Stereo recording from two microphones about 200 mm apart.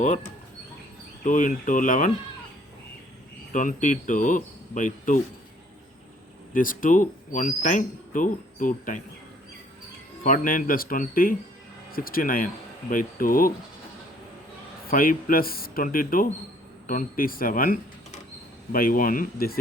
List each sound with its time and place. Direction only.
1.2 s speech: 40° left (ahead or behind)
3.5 s speech: 40° left (ahead or behind)
6.5 s speech: 45° left (ahead or behind)
10.2 s speech: 45° left (ahead or behind)
14.8 s speech: 45° left (ahead or behind)